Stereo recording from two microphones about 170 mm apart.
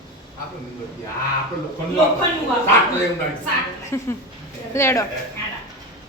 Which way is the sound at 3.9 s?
15° left (ahead or behind).